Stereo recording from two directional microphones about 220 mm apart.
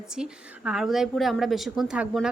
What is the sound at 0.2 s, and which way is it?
A woman's voice, 5° right (ahead or behind).